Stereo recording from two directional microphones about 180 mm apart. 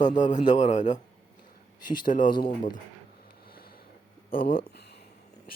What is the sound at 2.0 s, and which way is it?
Speech, 45° left (ahead or behind).